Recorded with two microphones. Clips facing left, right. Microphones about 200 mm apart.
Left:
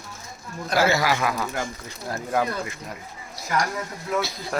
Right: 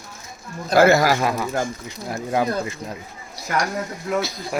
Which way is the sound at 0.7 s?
50° right (ahead or behind).